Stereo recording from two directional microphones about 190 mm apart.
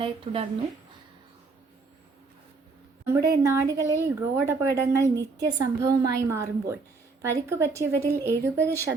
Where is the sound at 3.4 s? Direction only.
15° right (ahead or behind).